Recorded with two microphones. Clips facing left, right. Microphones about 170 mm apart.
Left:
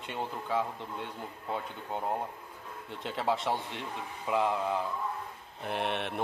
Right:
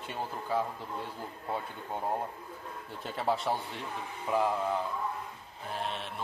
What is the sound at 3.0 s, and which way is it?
Speech, centre (ahead or behind).